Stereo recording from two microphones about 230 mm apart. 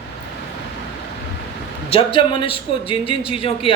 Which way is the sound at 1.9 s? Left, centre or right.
Left.